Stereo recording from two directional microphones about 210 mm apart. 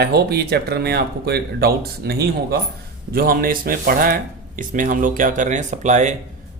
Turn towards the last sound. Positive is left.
turn(degrees=-35)  # may be behind; listen again after turning